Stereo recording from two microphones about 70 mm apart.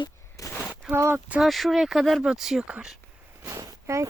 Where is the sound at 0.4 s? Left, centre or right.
Left.